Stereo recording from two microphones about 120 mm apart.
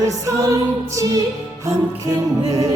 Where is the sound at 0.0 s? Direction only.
30° right (ahead or behind).